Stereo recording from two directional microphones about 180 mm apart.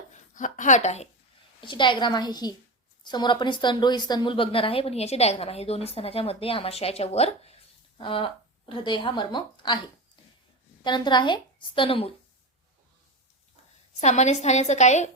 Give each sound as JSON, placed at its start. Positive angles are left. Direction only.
{"t": 0.1, "sound": "a woman's voice", "side_deg": 45}
{"t": 1.6, "sound": "a woman's voice", "side_deg": 25}
{"t": 10.8, "sound": "a woman's voice", "side_deg": 25}
{"t": 14.0, "sound": "a woman's voice", "side_deg": 40}